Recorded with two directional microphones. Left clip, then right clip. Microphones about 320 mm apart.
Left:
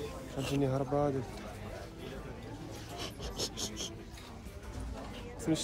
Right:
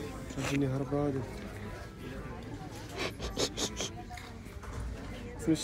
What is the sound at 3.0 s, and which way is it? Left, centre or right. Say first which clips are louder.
Rub: right 6 dB; centre.